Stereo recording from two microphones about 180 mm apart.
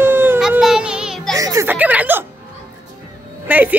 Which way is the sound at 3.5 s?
10° right (ahead or behind).